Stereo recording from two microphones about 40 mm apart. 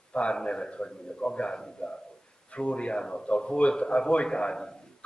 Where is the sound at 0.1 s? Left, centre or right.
Left.